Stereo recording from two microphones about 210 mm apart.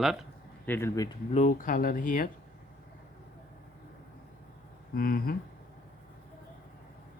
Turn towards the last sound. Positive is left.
turn(degrees=45)  # may be behind; listen again after turning